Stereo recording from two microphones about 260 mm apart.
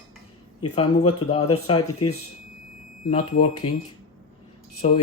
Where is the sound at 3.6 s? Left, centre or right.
Left.